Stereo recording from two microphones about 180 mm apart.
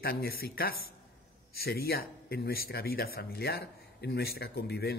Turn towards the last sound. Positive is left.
turn(degrees=65)  # may be behind; listen again after turning